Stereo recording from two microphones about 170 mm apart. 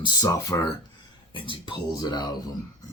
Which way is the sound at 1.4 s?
30° left (ahead or behind).